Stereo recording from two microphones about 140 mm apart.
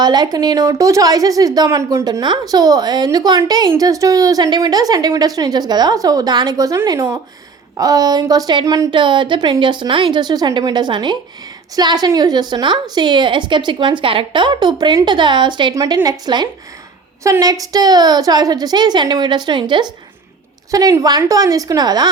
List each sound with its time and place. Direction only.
0.0 s a woman's voice: 30° right (ahead or behind)